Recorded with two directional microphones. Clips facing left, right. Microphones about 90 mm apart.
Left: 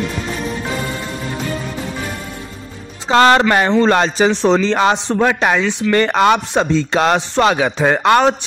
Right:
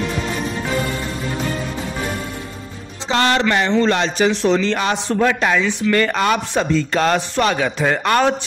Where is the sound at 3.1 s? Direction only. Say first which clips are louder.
Left 6 dB; 45° left (ahead or behind); by 8.3 s 20° left (ahead or behind).